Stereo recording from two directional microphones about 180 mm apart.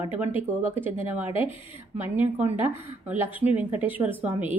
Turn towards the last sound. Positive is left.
turn(degrees=-10)  # may be behind; listen again after turning